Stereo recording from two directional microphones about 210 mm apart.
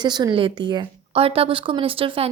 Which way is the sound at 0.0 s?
20° right (ahead or behind).